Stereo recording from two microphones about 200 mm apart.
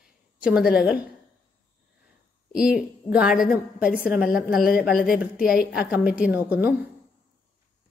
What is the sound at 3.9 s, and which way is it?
A woman's voice, 50° left (ahead or behind).